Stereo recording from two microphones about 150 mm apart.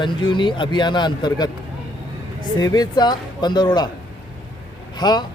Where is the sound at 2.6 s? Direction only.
30° left (ahead or behind).